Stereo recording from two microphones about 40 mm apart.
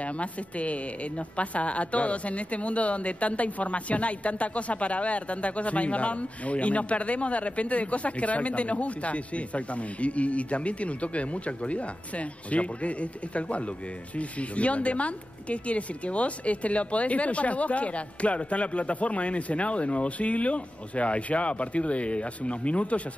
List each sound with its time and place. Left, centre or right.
0.0 s a woman's voice: left